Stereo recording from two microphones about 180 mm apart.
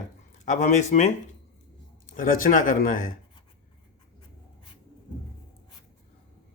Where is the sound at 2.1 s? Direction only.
50° left (ahead or behind).